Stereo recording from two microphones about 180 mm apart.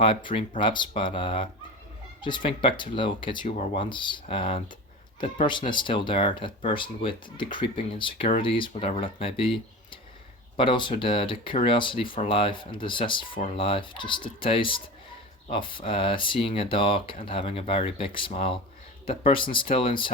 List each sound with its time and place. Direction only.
0.0 s speech: 30° left (ahead or behind)